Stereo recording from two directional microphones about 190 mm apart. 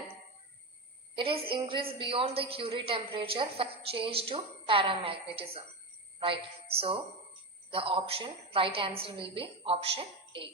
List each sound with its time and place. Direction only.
1.1 s a woman's voice: 25° right (ahead or behind)